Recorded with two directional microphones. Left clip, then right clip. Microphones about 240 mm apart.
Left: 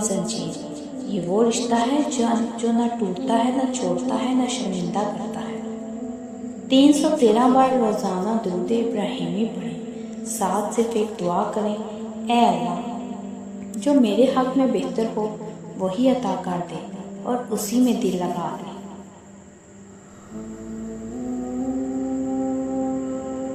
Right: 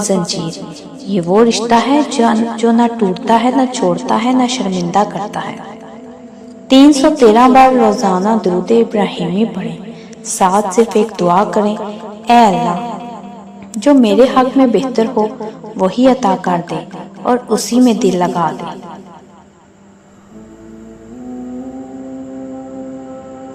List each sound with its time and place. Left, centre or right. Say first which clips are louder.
1.0 s a woman's voice: right 10 dB; right
6.7 s a woman's voice: right 9 dB; right
13.8 s a woman's voice: right 9 dB; centre